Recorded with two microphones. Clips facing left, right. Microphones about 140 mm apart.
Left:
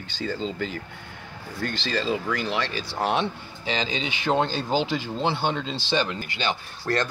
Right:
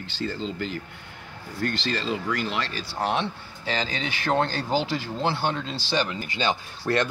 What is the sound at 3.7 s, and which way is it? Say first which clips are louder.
Speech: left 1 dB; 20° left (ahead or behind).